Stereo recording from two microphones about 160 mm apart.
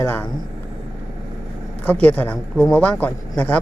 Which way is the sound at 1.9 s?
10° left (ahead or behind).